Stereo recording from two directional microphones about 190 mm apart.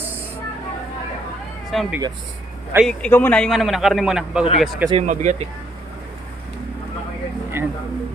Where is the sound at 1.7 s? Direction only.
Centre (ahead or behind).